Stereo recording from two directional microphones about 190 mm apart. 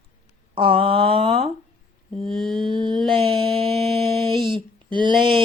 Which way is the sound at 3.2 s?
30° right (ahead or behind).